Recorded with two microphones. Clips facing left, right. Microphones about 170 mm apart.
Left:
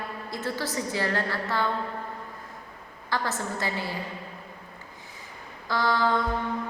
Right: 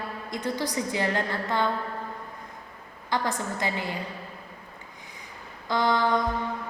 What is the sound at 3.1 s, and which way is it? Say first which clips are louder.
Speech: right 1 dB; 15° right (ahead or behind).